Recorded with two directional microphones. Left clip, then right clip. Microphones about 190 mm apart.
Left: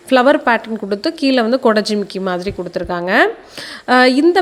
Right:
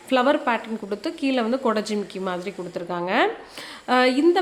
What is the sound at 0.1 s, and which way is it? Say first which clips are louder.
A woman's voice: left 9 dB; 30° left (ahead or behind).